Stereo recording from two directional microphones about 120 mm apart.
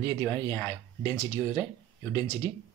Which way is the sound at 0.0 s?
30° left (ahead or behind).